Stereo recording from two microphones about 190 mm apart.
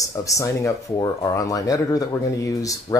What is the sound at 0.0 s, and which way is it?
Speech, 15° left (ahead or behind).